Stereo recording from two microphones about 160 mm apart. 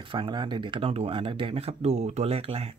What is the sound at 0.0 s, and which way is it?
Speech, 30° right (ahead or behind).